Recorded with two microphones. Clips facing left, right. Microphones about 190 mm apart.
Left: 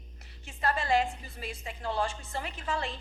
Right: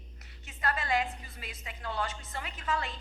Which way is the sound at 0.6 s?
30° left (ahead or behind).